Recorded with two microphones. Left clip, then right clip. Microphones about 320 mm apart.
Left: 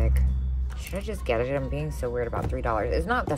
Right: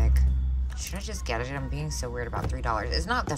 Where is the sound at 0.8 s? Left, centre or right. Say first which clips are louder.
Left 6 dB; centre.